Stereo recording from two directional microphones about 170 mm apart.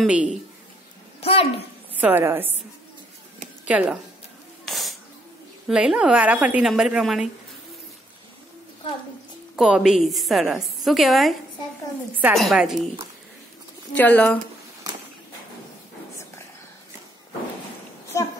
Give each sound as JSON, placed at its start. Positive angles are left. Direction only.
{"t": 0.0, "sound": "a woman's voice", "side_deg": -5}
{"t": 1.2, "sound": "a sound", "side_deg": 35}
{"t": 2.0, "sound": "a woman's voice", "side_deg": -10}
{"t": 3.6, "sound": "a woman's voice", "side_deg": -5}
{"t": 4.6, "sound": "a sound", "side_deg": 0}
{"t": 5.7, "sound": "a woman's voice", "side_deg": -5}
{"t": 9.6, "sound": "a woman's voice", "side_deg": -5}
{"t": 12.4, "sound": "a woman's voice", "side_deg": 0}
{"t": 13.9, "sound": "a woman's voice", "side_deg": 10}
{"t": 18.1, "sound": "a sound", "side_deg": 20}